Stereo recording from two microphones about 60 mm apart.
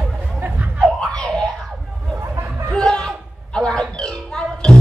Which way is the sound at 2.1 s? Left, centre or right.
Right.